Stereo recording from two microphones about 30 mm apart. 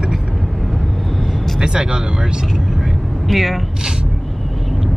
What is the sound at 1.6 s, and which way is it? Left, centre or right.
Speech, right.